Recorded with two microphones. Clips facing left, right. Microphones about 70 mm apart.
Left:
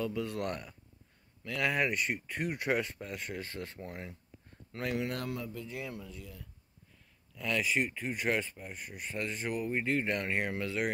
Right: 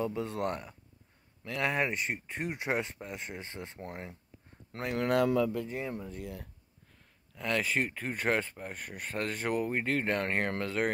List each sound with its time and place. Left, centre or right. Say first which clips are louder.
0.0 s speech: right 2 dB; right
5.0 s a man's voice: right 10 dB; right
5.7 s speech: right 4 dB; right
6.2 s a man's voice: right 8 dB; right
7.3 s speech: right 1 dB; right